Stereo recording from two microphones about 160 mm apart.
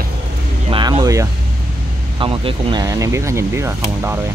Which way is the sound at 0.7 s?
30° right (ahead or behind).